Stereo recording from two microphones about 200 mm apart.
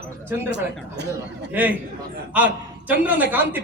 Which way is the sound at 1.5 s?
10° right (ahead or behind).